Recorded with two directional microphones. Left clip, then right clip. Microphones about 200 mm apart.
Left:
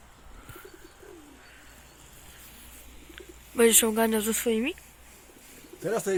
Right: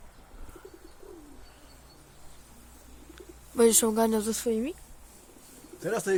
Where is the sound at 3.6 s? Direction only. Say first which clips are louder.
Left 1 dB; centre (ahead or behind).